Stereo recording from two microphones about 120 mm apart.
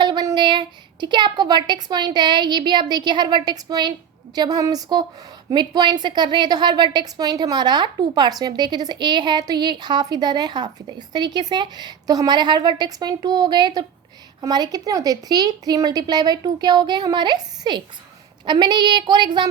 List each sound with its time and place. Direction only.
0.0 s a woman's voice: 35° right (ahead or behind)